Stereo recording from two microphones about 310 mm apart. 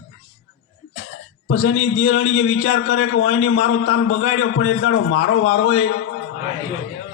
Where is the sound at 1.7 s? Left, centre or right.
Left.